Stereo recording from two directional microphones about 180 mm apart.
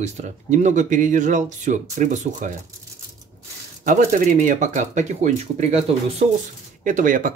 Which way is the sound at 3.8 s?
45° right (ahead or behind).